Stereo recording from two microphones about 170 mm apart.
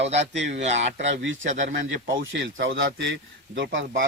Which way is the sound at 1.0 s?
90° right.